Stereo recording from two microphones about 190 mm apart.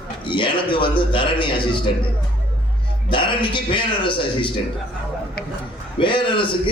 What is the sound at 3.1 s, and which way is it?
A man's voice, 25° left (ahead or behind).